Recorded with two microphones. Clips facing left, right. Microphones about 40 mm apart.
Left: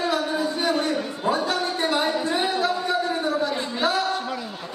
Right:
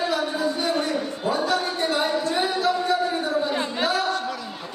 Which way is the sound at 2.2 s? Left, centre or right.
Centre.